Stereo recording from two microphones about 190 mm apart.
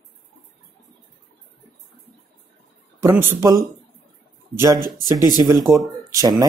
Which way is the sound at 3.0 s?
10° right (ahead or behind).